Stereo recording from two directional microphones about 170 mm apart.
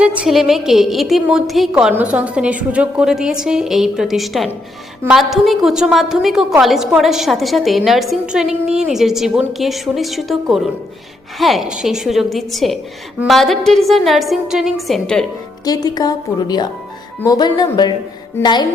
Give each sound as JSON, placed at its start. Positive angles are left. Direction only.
{"t": 0.0, "sound": "a woman's voice", "side_deg": -5}
{"t": 15.6, "sound": "a woman's voice", "side_deg": 20}